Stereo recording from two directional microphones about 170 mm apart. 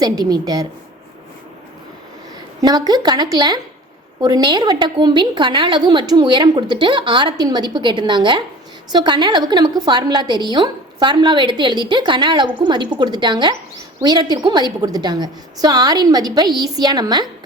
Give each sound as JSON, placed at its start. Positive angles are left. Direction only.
{"t": 0.0, "sound": "a woman's voice", "side_deg": -25}
{"t": 2.6, "sound": "a woman's voice", "side_deg": -25}